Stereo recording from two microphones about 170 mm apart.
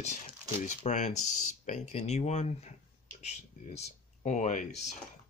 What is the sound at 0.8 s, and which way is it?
Speech, 45° left (ahead or behind).